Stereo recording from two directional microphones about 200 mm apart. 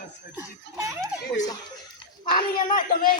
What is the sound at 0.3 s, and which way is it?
Speech, 15° right (ahead or behind).